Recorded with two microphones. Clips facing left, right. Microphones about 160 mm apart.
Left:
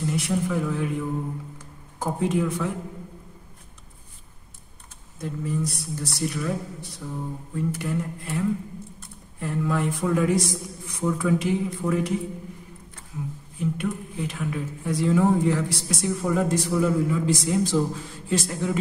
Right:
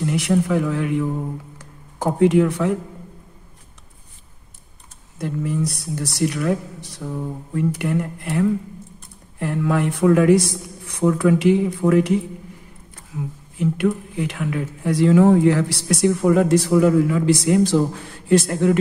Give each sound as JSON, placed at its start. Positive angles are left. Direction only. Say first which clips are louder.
{"t": 0.0, "sound": "speech", "louder": "right 6 dB", "side_deg": -70}
{"t": 5.2, "sound": "speech", "louder": "right 5 dB", "side_deg": -75}
{"t": 13.6, "sound": "speech", "louder": "right 7 dB", "side_deg": -75}